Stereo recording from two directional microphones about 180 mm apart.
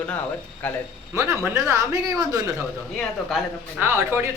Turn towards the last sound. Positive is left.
turn(degrees=-15)  # may be behind; listen again after turning